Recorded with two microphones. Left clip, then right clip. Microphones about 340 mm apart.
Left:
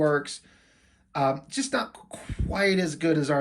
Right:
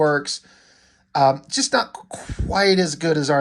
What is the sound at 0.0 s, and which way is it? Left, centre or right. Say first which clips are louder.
Speech: right 5 dB; centre.